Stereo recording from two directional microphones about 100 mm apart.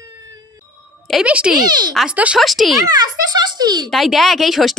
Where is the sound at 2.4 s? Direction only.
Centre (ahead or behind).